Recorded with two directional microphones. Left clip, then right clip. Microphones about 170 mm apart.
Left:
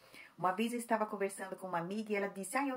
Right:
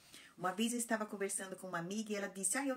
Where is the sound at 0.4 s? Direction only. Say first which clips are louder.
Left 4 dB; 25° right (ahead or behind).